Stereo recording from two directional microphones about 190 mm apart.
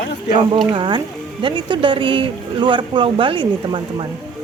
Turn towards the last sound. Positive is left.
turn(degrees=-25)  # may be behind; listen again after turning